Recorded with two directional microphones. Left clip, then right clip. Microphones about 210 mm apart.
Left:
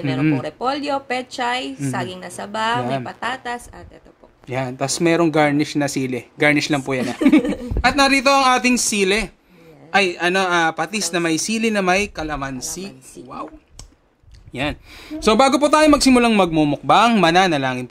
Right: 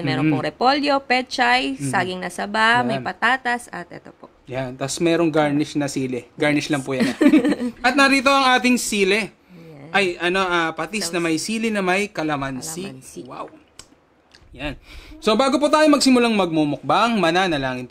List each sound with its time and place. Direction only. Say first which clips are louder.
0.4 s a woman's voice: right 4 dB; 20° right (ahead or behind)
4.5 s a man's voice: left 4 dB; 30° left (ahead or behind)
7.2 s a woman's voice: even; 25° right (ahead or behind)
7.8 s a man's voice: left 1 dB; 25° left (ahead or behind)
14.5 s a man's voice: left 6 dB; 30° left (ahead or behind)